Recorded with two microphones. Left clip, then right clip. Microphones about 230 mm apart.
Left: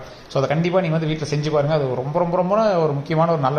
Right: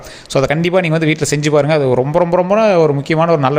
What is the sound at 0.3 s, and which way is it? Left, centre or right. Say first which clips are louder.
A man's voice: right 6 dB; right.